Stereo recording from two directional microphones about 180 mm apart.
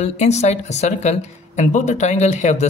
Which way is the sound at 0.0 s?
40° left (ahead or behind).